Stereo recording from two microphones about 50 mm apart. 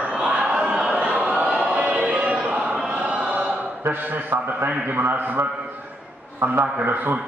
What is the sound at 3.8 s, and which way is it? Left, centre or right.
A man's voice, right.